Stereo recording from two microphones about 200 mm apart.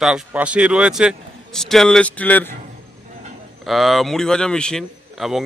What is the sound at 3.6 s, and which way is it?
A man's voice, centre (ahead or behind).